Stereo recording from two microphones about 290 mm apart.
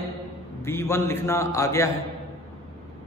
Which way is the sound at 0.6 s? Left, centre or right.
Centre.